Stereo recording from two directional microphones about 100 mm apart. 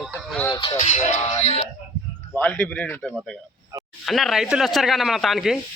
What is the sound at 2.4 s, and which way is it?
Speech, 15° left (ahead or behind).